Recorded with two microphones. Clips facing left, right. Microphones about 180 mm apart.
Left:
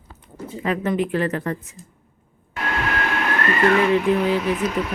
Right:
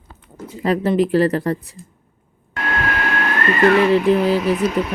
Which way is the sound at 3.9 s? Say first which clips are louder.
Right 3 dB; 35° right (ahead or behind).